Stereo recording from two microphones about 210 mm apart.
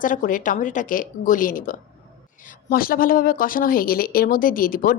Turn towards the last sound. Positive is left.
turn(degrees=40)  # may be behind; listen again after turning